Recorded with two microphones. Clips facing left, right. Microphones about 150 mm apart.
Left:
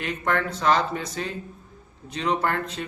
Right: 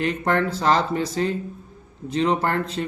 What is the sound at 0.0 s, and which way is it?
A man's voice, 30° right (ahead or behind).